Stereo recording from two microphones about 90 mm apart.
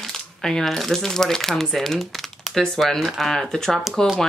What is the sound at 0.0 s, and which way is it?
Speech, 5° left (ahead or behind).